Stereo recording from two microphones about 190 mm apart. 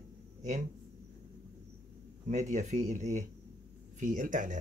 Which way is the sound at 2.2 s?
40° right (ahead or behind).